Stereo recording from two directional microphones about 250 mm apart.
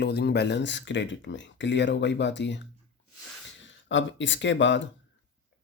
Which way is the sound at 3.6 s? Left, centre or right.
Left.